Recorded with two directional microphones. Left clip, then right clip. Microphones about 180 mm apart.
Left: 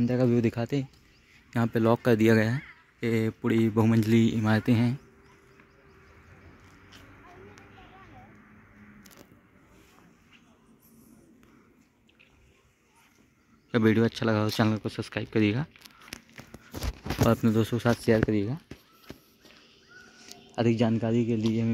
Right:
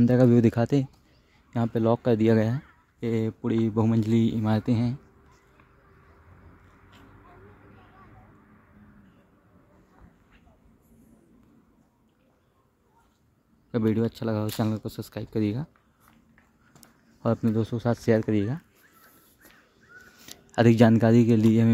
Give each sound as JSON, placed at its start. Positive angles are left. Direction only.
{"t": 0.0, "sound": "speech", "side_deg": -55}
{"t": 1.5, "sound": "speech", "side_deg": -10}
{"t": 13.7, "sound": "speech", "side_deg": -5}
{"t": 17.3, "sound": "speech", "side_deg": -10}
{"t": 20.2, "sound": "speech", "side_deg": -50}